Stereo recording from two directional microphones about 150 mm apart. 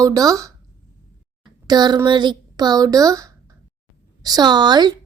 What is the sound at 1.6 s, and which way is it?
A woman's voice, 30° right (ahead or behind).